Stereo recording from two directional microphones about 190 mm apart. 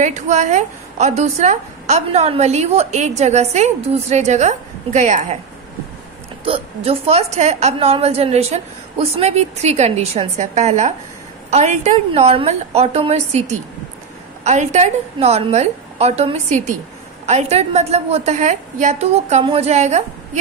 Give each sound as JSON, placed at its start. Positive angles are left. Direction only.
{"t": 0.0, "sound": "a woman's voice", "side_deg": -40}
{"t": 6.4, "sound": "a woman's voice", "side_deg": -30}